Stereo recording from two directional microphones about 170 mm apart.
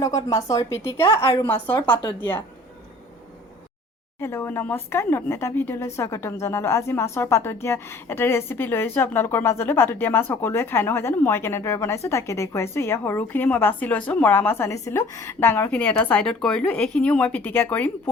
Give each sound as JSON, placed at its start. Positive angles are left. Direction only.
{"t": 0.0, "sound": "speech", "side_deg": 20}
{"t": 4.2, "sound": "speech", "side_deg": 10}